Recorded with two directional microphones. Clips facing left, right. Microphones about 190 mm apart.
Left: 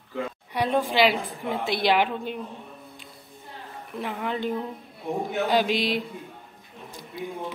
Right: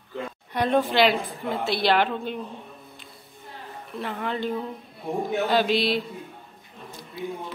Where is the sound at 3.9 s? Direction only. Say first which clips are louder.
Even; 10° left (ahead or behind).